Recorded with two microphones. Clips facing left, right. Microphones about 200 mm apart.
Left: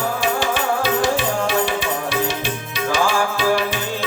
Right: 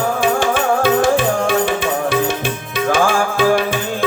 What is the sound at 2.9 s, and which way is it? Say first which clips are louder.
Music: right 3 dB; 50° right (ahead or behind).